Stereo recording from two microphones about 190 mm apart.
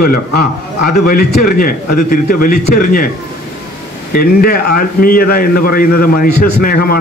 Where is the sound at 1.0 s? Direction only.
50° left (ahead or behind).